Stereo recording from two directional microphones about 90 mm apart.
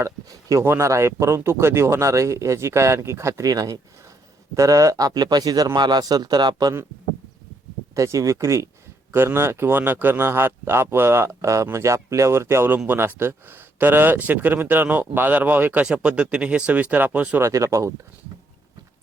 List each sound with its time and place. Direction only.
0.0 s speech: 40° right (ahead or behind)
7.9 s speech: 35° right (ahead or behind); by 17.4 s 20° right (ahead or behind)
17.4 s speech: 35° right (ahead or behind)